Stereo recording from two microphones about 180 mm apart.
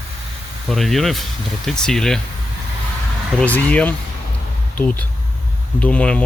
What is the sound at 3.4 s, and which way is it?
Speech, 10° left (ahead or behind).